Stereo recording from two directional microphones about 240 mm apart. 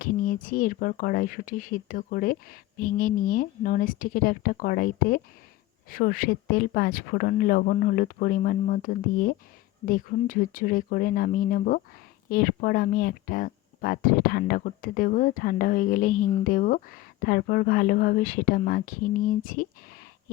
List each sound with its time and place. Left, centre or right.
0.0 s speech: left